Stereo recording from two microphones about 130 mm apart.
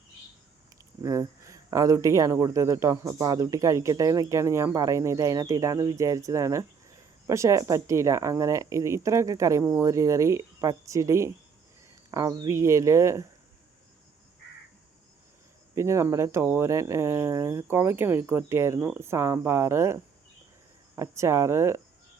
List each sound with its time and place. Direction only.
1.0 s speech: 25° right (ahead or behind)
15.7 s speech: 20° right (ahead or behind)